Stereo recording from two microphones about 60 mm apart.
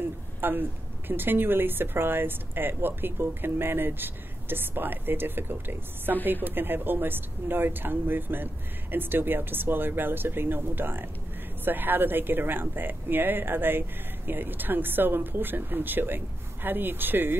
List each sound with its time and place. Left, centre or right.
0.4 s speech: right